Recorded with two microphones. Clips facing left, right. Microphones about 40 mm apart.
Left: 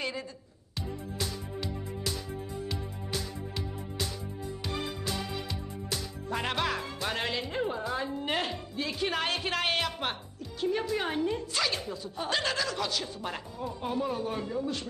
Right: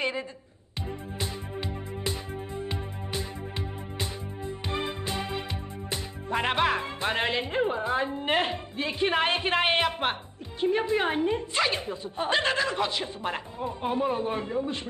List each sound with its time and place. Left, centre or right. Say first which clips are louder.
0.8 s music: right 1 dB; right
10.6 s a woman's voice: right 5 dB; right